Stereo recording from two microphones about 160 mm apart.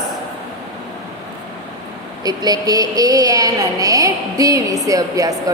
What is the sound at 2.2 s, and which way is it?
A woman's voice, 25° right (ahead or behind).